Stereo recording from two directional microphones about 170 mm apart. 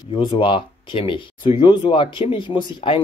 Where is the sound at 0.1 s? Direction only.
30° left (ahead or behind).